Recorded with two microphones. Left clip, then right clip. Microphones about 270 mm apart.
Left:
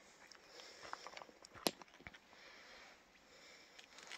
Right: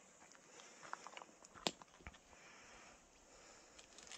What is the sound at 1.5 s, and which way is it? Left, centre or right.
Clip-clop, left.